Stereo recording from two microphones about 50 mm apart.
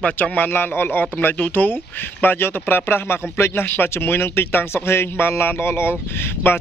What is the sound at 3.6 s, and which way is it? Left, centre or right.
Speech, left.